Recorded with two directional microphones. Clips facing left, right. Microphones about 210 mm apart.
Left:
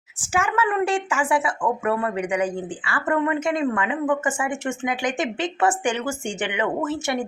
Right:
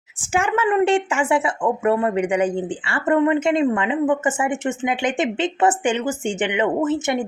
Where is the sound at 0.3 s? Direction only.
30° right (ahead or behind).